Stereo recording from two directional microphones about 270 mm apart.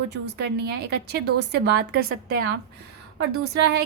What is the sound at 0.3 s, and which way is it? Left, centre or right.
A woman's voice, right.